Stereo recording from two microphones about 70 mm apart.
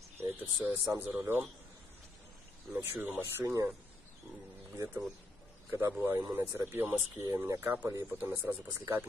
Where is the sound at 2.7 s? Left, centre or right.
Right.